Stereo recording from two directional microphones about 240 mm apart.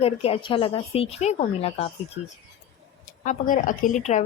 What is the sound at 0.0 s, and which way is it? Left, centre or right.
Speech, left.